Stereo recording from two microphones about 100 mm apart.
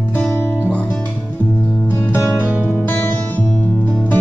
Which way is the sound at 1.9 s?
25° left (ahead or behind).